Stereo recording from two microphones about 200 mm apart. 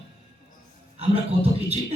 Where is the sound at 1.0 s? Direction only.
30° right (ahead or behind).